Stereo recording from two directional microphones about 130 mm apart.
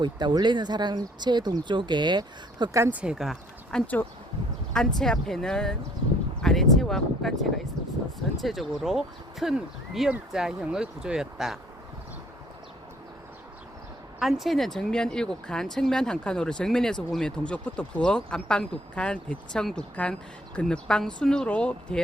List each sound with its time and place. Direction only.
0.0 s speech: 35° right (ahead or behind)
2.7 s speech: 20° right (ahead or behind)
3.0 s speech: 5° right (ahead or behind)
8.4 s speech: centre (ahead or behind)
14.2 s speech: centre (ahead or behind)